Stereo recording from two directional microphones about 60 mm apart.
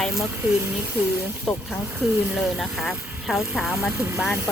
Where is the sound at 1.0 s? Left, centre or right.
Right.